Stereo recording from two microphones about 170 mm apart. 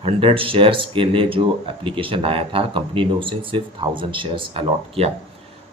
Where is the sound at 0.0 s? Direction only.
35° right (ahead or behind).